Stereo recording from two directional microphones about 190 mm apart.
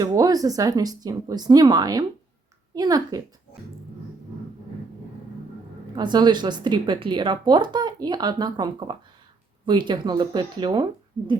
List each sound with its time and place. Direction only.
0.0 s speech: 20° right (ahead or behind)
5.9 s speech: 25° right (ahead or behind)